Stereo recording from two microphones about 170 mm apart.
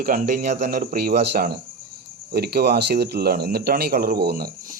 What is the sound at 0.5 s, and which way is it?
Speech, 50° right (ahead or behind).